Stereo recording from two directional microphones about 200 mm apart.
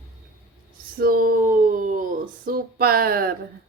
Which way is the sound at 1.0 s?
45° right (ahead or behind).